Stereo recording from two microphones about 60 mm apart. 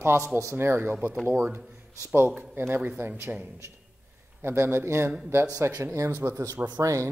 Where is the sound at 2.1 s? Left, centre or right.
Right.